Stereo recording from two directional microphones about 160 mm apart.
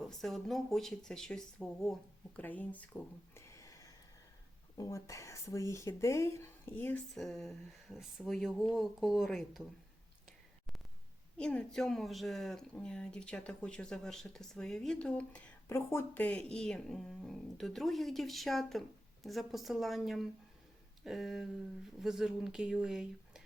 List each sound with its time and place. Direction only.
0.0 s speech: centre (ahead or behind)
7.1 s speech: centre (ahead or behind)
11.3 s speech: 5° left (ahead or behind)